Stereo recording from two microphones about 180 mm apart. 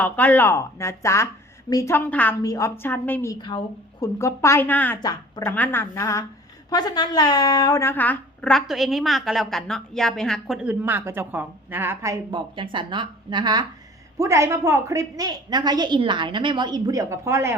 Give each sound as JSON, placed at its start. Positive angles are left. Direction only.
{"t": 0.0, "sound": "speech", "side_deg": 10}
{"t": 4.9, "sound": "a woman's voice", "side_deg": 25}
{"t": 5.5, "sound": "a woman's voice", "side_deg": 10}